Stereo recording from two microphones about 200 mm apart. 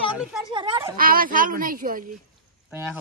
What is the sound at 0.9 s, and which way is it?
Speech, 45° right (ahead or behind).